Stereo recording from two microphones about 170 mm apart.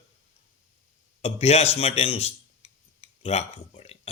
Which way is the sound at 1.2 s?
40° left (ahead or behind).